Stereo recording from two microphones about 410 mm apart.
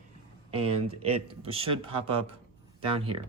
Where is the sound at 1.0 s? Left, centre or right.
Centre.